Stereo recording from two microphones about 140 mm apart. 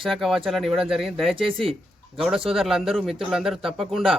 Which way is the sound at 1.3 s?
40° right (ahead or behind).